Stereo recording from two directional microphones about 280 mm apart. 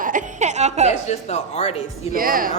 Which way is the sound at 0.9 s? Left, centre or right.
Left.